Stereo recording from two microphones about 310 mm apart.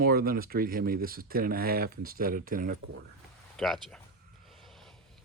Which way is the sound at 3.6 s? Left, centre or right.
Centre.